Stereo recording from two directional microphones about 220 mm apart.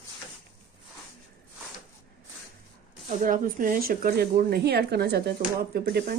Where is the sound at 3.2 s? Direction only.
40° right (ahead or behind).